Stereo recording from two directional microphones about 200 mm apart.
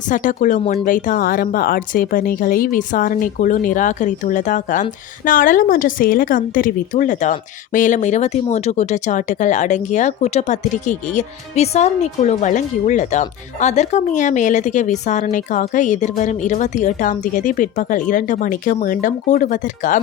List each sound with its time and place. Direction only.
0.1 s speech: 40° left (ahead or behind)